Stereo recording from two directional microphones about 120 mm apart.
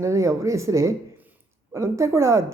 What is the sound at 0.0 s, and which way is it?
Speech, 25° right (ahead or behind).